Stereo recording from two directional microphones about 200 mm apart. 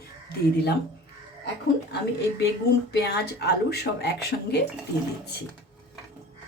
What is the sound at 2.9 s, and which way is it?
Speech, 55° left (ahead or behind).